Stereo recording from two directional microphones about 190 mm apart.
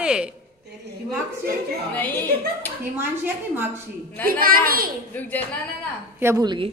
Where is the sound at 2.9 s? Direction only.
10° right (ahead or behind).